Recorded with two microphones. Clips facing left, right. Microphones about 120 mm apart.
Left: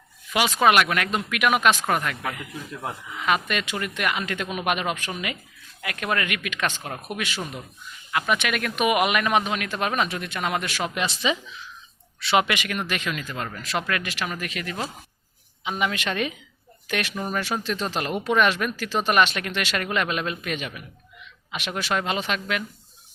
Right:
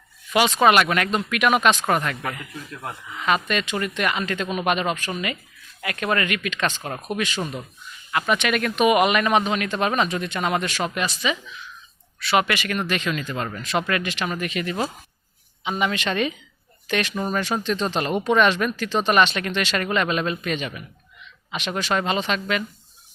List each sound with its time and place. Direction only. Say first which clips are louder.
0.3 s speech: right 2 dB; 5° left (ahead or behind)
11.0 s speech: even; 25° left (ahead or behind)
12.5 s speech: right 3 dB; 10° left (ahead or behind)